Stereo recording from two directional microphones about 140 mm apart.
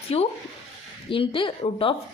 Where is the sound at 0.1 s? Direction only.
45° left (ahead or behind).